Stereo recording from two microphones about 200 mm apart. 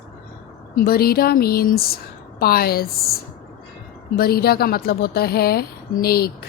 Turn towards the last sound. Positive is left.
turn(degrees=50)  # may be behind; listen again after turning